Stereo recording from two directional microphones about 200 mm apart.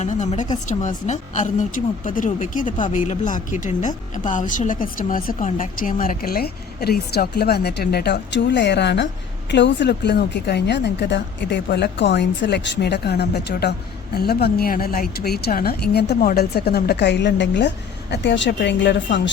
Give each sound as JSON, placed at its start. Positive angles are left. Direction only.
{"t": 0.0, "sound": "a woman's voice", "side_deg": 35}